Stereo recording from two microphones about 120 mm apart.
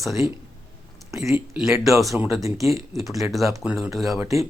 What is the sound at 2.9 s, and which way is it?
Speech, centre (ahead or behind).